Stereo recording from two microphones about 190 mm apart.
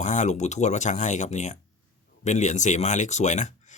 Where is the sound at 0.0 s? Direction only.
40° left (ahead or behind).